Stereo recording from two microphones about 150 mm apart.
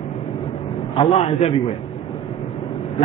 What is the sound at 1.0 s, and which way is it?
Speech, 40° left (ahead or behind).